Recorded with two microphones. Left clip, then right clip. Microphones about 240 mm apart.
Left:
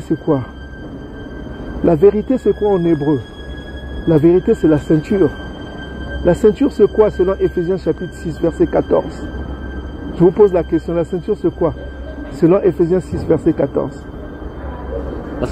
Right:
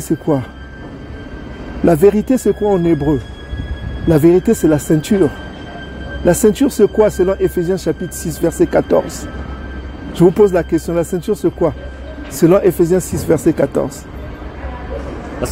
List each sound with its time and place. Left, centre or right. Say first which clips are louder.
1.9 s speech: right 1 dB; right
10.2 s speech: even; right